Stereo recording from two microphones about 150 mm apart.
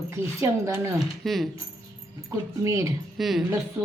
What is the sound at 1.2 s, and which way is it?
Speech, centre (ahead or behind).